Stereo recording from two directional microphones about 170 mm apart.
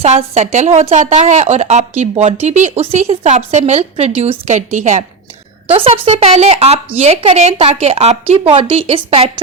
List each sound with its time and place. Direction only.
0.0 s a woman's voice: 40° right (ahead or behind)
5.6 s a woman's voice: 35° right (ahead or behind)